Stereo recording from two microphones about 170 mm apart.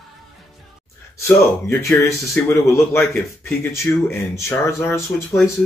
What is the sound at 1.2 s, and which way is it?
Speech, 15° left (ahead or behind).